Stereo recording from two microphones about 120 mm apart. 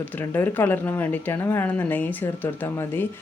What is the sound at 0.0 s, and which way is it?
A woman's voice, 15° left (ahead or behind).